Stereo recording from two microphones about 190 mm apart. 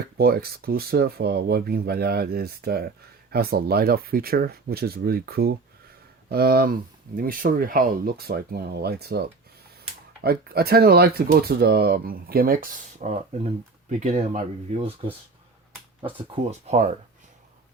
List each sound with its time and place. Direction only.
0.2 s speech: 55° right (ahead or behind); by 16.9 s 35° right (ahead or behind)